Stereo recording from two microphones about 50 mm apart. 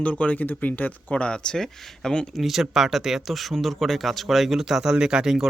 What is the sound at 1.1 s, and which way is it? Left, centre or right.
Speech, centre.